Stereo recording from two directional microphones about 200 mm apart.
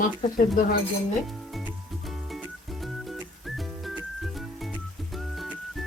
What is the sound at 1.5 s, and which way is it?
Music, centre (ahead or behind).